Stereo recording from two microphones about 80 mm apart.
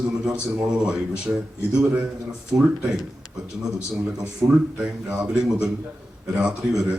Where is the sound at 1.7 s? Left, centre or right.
Centre.